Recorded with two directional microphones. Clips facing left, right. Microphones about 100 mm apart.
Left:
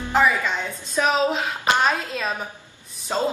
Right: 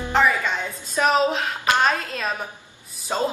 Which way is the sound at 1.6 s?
15° left (ahead or behind).